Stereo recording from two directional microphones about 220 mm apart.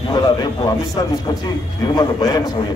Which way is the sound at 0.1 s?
20° left (ahead or behind).